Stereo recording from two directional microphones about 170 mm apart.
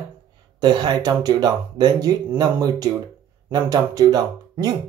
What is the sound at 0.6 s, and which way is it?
Speech, 25° right (ahead or behind).